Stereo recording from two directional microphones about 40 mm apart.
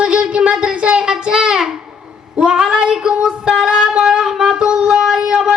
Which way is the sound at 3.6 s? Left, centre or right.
Centre.